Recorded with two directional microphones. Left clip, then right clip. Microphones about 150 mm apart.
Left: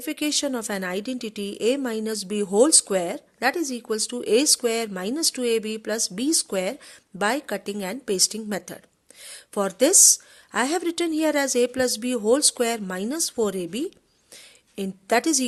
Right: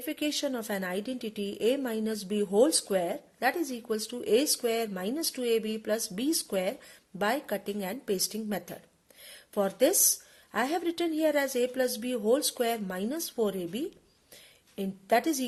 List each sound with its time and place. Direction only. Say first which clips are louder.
0.0 s a woman's voice: left 6 dB; 40° left (ahead or behind)